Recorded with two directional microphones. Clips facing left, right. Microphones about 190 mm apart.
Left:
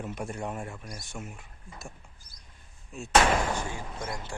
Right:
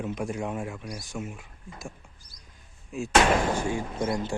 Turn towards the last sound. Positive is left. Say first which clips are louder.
# right 9 dB
turn(degrees=-15)  # may be behind; listen again after turning